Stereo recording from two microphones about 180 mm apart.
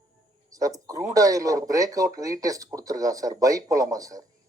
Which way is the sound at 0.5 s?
20° right (ahead or behind).